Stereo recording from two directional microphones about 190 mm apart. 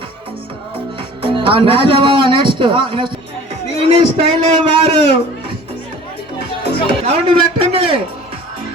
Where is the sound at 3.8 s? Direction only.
30° right (ahead or behind).